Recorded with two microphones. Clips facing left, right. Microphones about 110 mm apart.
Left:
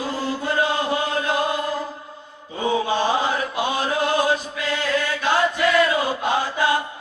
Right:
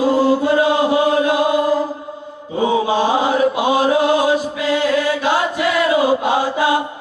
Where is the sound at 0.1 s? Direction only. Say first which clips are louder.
Right 10 dB; 20° right (ahead or behind).